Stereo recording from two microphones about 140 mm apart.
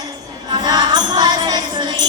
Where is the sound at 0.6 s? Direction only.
30° right (ahead or behind).